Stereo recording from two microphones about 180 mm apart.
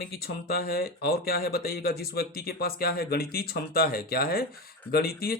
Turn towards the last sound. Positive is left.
turn(degrees=55)  # may be behind; listen again after turning